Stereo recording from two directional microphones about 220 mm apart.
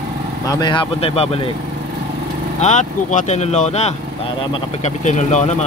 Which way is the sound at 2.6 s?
35° left (ahead or behind).